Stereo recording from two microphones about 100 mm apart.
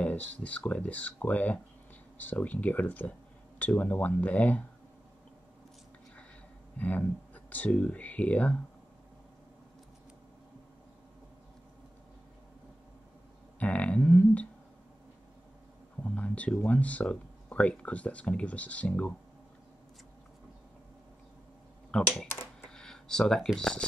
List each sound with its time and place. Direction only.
0.0 s speech: 15° left (ahead or behind)
6.8 s speech: 15° left (ahead or behind)
13.6 s a sound: 15° left (ahead or behind)
16.0 s speech: 15° left (ahead or behind)
21.9 s speech: 5° left (ahead or behind)